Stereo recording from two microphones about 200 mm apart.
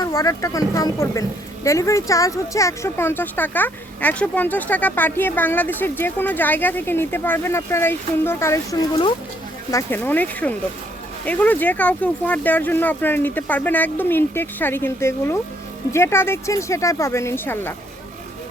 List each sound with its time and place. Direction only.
0.0 s speech: 20° left (ahead or behind)